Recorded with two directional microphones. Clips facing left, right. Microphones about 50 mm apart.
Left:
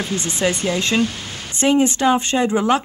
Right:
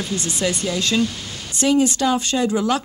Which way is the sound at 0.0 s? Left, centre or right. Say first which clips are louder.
Left 2 dB; left.